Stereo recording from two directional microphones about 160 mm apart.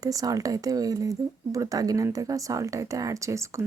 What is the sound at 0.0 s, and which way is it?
A woman's voice, 20° right (ahead or behind).